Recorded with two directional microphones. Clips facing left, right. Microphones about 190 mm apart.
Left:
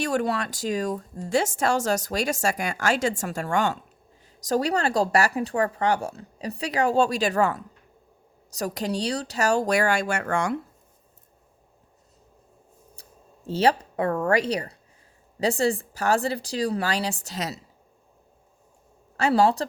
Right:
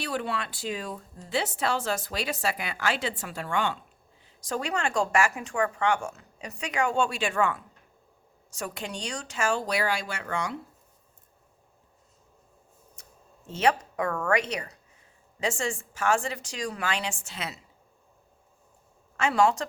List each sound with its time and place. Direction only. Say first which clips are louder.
0.0 s speech: left 6 dB; 45° left (ahead or behind)
13.0 s a sound: even; 35° left (ahead or behind)
13.5 s speech: left 3 dB; 35° left (ahead or behind)
19.1 s speech: left 3 dB; 35° left (ahead or behind)